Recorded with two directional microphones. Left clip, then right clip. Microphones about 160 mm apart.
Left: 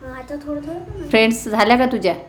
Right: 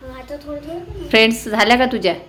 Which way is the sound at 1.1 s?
5° left (ahead or behind).